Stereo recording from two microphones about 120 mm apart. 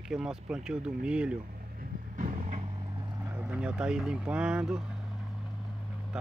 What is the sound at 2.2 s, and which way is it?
Vehicle, 90° right.